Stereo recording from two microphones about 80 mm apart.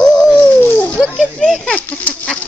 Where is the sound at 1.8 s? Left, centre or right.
Left.